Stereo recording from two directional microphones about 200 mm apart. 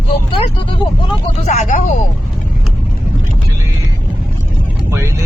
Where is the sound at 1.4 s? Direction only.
35° left (ahead or behind).